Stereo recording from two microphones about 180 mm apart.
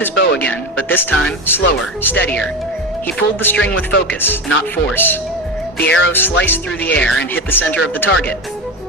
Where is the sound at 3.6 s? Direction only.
90° left.